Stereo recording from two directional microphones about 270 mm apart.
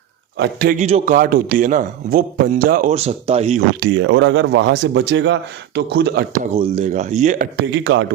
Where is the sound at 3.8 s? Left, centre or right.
Right.